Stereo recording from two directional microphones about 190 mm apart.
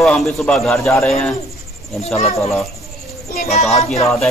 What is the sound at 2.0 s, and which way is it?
Speech, 35° left (ahead or behind).